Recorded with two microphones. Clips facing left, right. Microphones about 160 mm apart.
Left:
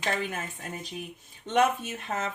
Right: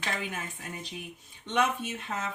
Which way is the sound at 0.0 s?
45° left (ahead or behind).